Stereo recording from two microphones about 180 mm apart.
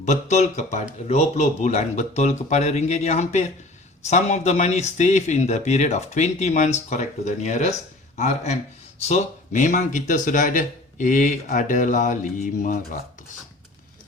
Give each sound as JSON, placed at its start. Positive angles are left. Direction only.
{"t": 0.0, "sound": "speech", "side_deg": 40}